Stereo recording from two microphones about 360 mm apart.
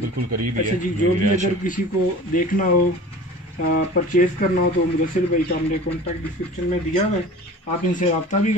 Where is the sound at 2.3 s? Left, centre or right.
Left.